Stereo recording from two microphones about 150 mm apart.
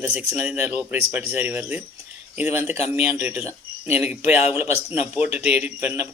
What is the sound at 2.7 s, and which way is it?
Speech, 45° left (ahead or behind).